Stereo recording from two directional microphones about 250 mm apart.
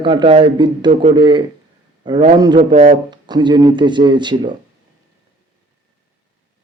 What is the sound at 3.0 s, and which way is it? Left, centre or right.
Speech, centre.